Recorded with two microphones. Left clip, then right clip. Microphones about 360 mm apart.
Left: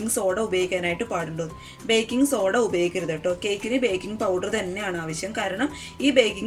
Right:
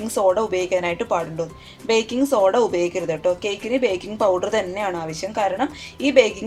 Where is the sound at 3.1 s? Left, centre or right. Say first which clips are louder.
Right 4 dB; right.